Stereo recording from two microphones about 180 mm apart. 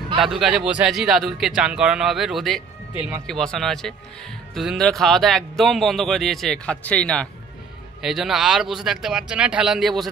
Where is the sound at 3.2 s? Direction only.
5° left (ahead or behind).